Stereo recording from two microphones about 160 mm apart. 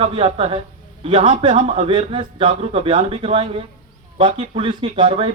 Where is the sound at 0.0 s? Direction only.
35° right (ahead or behind).